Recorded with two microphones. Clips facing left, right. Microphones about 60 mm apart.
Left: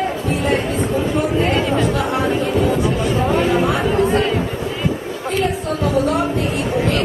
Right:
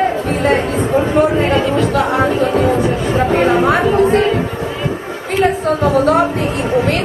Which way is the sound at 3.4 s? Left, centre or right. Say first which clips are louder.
Right 5 dB; right.